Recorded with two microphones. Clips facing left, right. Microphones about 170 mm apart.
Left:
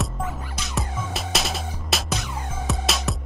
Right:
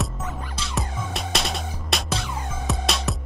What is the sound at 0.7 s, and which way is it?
Music, centre (ahead or behind).